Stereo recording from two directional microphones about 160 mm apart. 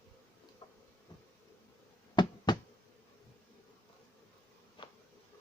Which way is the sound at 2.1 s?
25° left (ahead or behind).